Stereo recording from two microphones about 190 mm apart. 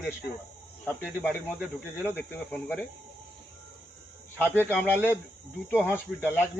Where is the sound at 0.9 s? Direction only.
10° left (ahead or behind).